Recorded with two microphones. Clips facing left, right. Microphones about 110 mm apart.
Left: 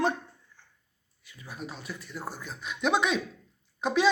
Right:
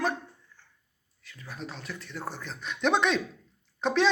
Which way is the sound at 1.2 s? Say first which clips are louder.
Even; 15° left (ahead or behind).